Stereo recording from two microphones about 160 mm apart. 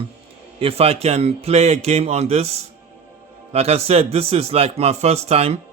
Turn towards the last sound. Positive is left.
turn(degrees=-40)  # may be behind; listen again after turning